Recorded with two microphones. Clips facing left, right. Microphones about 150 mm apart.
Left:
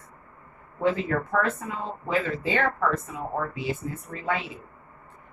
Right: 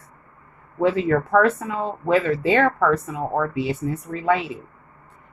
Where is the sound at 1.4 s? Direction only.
65° right (ahead or behind).